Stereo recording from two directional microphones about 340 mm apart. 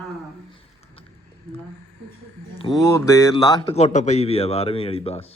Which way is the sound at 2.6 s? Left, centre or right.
Centre.